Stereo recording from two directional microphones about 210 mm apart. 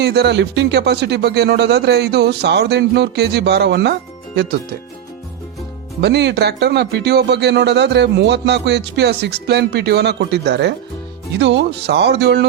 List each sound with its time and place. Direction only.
0.0 s speech: 50° right (ahead or behind)
6.0 s speech: 55° right (ahead or behind)